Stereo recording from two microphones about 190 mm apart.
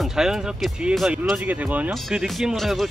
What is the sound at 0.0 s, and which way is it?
Speech, centre (ahead or behind).